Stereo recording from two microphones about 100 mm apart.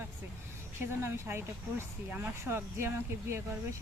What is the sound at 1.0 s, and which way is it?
Speech, 25° right (ahead or behind).